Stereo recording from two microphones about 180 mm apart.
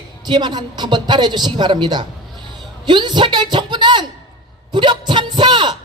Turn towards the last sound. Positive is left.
turn(degrees=-25)  # may be behind; listen again after turning